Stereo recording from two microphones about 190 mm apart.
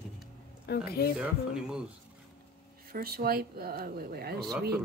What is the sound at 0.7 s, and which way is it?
Speech, 55° left (ahead or behind).